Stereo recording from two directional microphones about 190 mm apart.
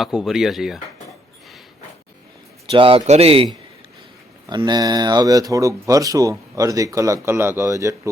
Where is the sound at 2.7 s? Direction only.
30° right (ahead or behind).